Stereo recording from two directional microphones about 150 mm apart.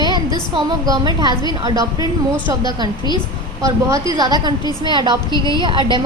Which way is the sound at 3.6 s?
20° right (ahead or behind).